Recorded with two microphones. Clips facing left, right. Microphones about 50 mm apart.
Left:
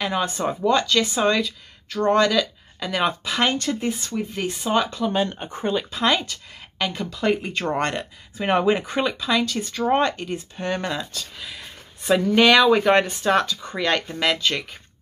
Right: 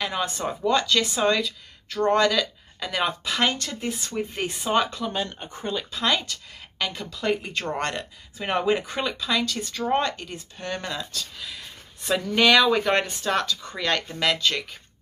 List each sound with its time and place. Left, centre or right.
0.0 s speech: centre
4.0 s speech: centre
5.1 s speech: left
5.9 s speech: centre